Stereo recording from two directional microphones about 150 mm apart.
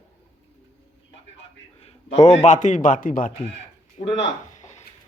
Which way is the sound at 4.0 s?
50° left (ahead or behind).